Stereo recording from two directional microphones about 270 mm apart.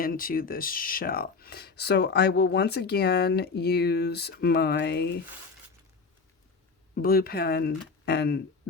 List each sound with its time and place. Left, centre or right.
0.0 s speech: left
6.9 s speech: left